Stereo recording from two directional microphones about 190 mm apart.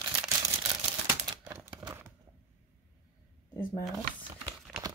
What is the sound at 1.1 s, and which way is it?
Typewriter, 10° right (ahead or behind).